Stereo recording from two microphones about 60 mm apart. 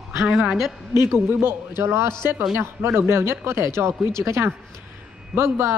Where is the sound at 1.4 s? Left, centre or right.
Right.